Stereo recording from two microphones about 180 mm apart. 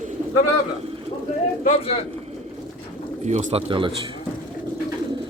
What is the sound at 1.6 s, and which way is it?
Speech, 35° left (ahead or behind).